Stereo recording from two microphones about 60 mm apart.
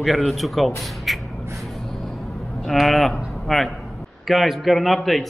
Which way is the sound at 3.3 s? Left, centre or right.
Centre.